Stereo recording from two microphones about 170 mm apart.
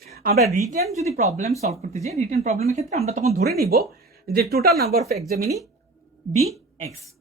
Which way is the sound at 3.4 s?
65° right (ahead or behind).